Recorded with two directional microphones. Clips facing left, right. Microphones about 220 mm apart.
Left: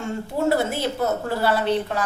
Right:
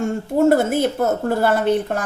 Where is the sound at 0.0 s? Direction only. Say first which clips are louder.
Right 7 dB; 50° right (ahead or behind).